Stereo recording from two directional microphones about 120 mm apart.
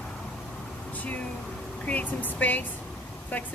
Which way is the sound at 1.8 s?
15° left (ahead or behind).